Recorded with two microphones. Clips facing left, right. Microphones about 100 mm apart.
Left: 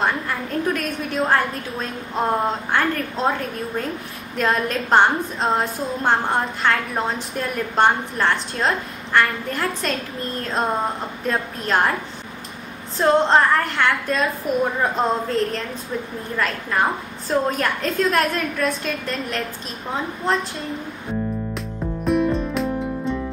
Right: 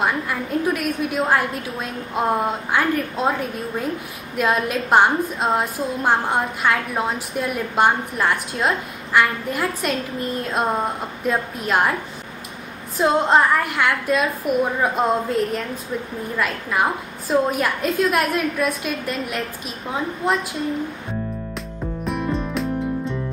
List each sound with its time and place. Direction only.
0.0 s a woman's voice: 5° right (ahead or behind)
12.9 s a woman's voice: 10° right (ahead or behind)
22.0 s music: centre (ahead or behind)